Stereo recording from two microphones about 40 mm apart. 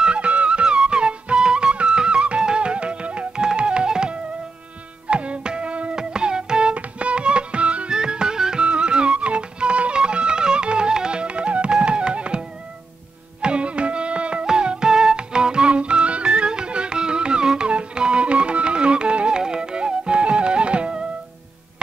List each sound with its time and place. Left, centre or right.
0.0 s music: right
5.1 s music: right
7.9 s music: centre